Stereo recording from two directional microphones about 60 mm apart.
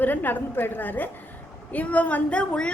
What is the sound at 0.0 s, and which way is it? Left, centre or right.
A woman's voice, left.